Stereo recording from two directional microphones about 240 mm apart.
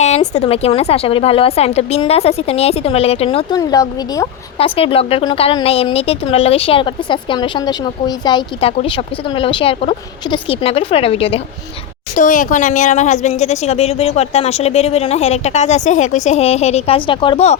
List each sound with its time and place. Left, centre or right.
0.3 s a woman's voice: left